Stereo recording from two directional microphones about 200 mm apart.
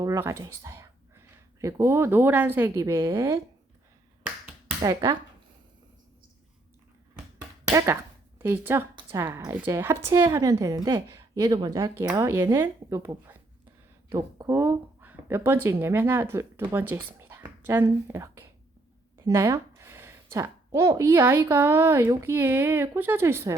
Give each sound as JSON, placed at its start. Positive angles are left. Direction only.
{"t": 0.0, "sound": "speech", "side_deg": -15}
{"t": 4.8, "sound": "speech", "side_deg": -20}
{"t": 7.3, "sound": "a sound", "side_deg": -15}
{"t": 8.4, "sound": "a woman's voice", "side_deg": -10}